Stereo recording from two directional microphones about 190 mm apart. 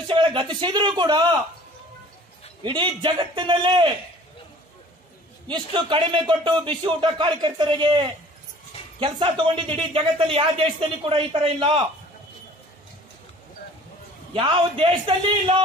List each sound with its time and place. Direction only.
0.1 s speech: 25° right (ahead or behind)
2.6 s speech: 25° right (ahead or behind)
5.5 s speech: 25° right (ahead or behind)
14.3 s speech: 30° right (ahead or behind)